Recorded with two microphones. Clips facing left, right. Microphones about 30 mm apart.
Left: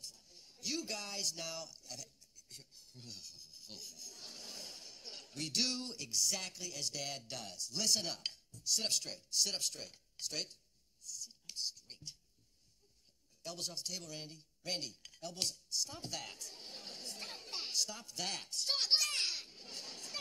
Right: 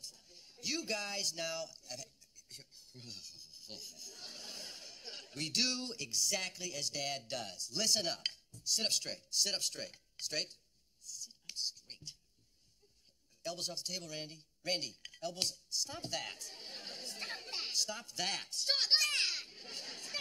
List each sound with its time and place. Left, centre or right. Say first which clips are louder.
0.1 s music: right 1 dB; right
0.6 s speech: right 3 dB; right
1.9 s a sound: right 2 dB; right
6.7 s speech: right 2 dB; right
11.4 s whispering: right 2 dB; right
13.4 s speech: right 3 dB; right
15.8 s chatter: right 5 dB; right